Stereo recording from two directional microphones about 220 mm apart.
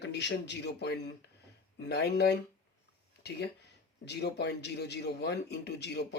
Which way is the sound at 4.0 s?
50° left (ahead or behind).